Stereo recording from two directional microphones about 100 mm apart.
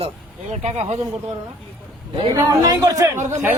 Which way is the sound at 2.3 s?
40° right (ahead or behind).